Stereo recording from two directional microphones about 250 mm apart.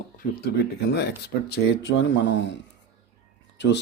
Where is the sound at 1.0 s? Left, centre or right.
Left.